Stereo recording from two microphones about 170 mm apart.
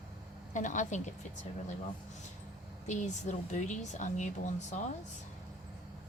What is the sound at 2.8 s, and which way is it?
Speech, 45° left (ahead or behind).